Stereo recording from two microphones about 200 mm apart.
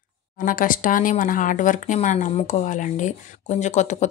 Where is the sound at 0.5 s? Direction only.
45° left (ahead or behind).